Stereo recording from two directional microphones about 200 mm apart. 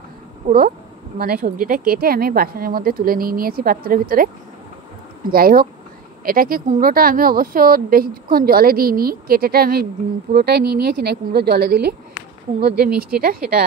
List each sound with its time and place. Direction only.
0.5 s speech: 45° right (ahead or behind)
5.3 s speech: 50° right (ahead or behind)